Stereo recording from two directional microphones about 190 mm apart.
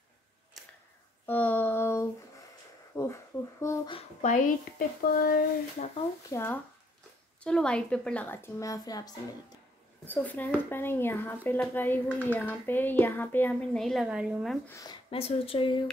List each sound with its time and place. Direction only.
0.6 s scissors: centre (ahead or behind)
1.2 s a sound: 10° left (ahead or behind)
3.6 s speech: 25° left (ahead or behind)
4.2 s speech: 45° left (ahead or behind)
6.3 s speech: 10° left (ahead or behind)
10.0 s speech: 10° left (ahead or behind)
14.7 s speech: 20° left (ahead or behind)
15.0 s speech: 30° left (ahead or behind)